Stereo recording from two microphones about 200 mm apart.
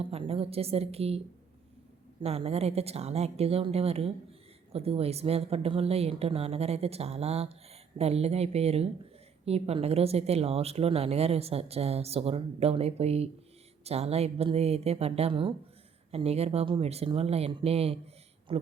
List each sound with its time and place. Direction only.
0.0 s a woman's voice: 30° right (ahead or behind)
2.2 s speech: 30° right (ahead or behind)